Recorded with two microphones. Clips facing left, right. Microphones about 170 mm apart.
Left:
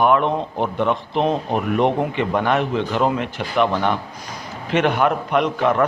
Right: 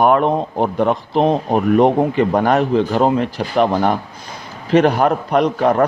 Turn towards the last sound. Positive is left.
turn(degrees=-40)  # may be behind; listen again after turning